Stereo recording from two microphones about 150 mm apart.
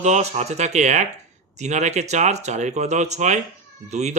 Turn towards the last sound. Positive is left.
turn(degrees=-50)  # may be behind; listen again after turning